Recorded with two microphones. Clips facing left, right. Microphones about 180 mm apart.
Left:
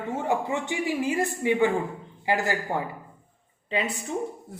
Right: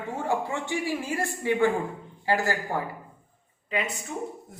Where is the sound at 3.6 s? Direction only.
30° left (ahead or behind).